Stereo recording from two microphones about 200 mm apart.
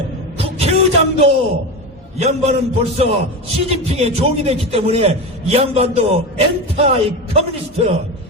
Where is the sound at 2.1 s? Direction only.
35° right (ahead or behind).